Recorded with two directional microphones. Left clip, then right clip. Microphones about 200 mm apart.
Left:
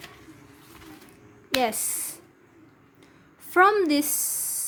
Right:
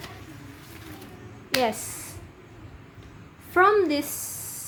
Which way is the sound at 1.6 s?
45° left (ahead or behind).